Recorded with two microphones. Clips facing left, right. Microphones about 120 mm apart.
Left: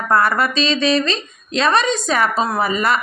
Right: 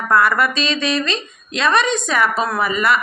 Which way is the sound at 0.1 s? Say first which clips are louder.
Right 1 dB; 35° left (ahead or behind).